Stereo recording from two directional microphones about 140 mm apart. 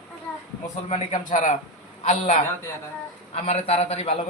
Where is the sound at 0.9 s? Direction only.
60° left (ahead or behind).